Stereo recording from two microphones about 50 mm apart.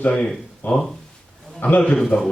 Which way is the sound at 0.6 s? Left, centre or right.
Left.